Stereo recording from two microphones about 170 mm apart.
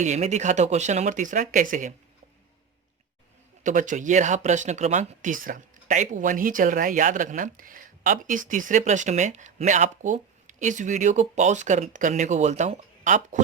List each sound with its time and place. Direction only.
0.0 s speech: 40° right (ahead or behind)
3.6 s speech: 50° right (ahead or behind)